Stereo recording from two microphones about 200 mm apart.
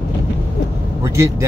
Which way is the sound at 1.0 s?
15° right (ahead or behind).